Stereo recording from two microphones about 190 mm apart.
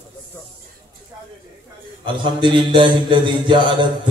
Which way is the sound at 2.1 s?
25° right (ahead or behind).